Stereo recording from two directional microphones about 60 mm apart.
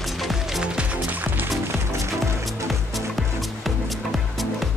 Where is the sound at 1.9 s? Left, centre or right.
Right.